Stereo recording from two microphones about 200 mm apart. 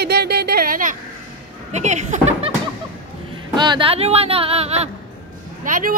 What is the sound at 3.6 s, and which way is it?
Speech, 25° right (ahead or behind).